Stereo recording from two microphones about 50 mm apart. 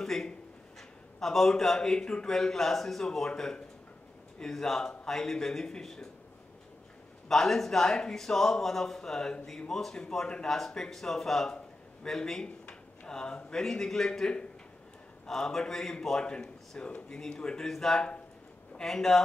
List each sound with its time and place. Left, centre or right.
0.0 s a sound: centre
0.7 s a man's voice: centre
7.2 s a man's voice: centre
11.5 s a sound: centre
12.6 s speech: centre
15.2 s a man's voice: centre
17.6 s a man's voice: centre